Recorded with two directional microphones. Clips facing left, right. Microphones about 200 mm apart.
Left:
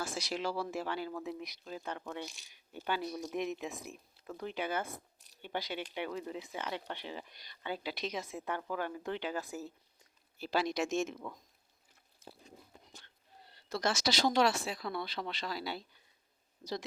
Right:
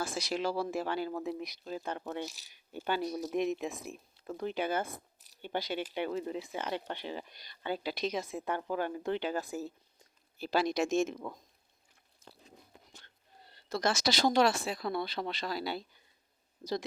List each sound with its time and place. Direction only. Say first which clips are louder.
0.0 s speech: right 3 dB; 50° right (ahead or behind)
2.2 s speech: right 4 dB; 5° right (ahead or behind)
2.7 s speech: right 3 dB; 35° right (ahead or behind)
10.4 s speech: right 3 dB; 45° right (ahead or behind)
13.8 s speech: right 2 dB; 55° right (ahead or behind)